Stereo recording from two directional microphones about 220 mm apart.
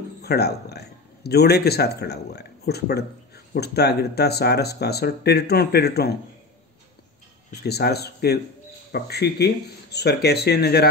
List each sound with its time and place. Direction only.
0.2 s a man's voice: 45° left (ahead or behind)
7.6 s a man's voice: 45° left (ahead or behind)